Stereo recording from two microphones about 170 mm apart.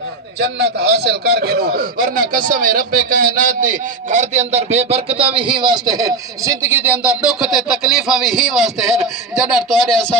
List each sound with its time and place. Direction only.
0.3 s a man's voice: 75° right (ahead or behind); by 10.2 s 5° left (ahead or behind)